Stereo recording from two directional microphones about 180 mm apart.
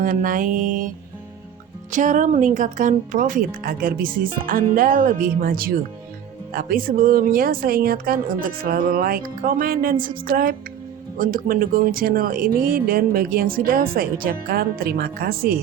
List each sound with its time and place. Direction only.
0.0 s speech: 50° right (ahead or behind)
1.9 s speech: 45° right (ahead or behind)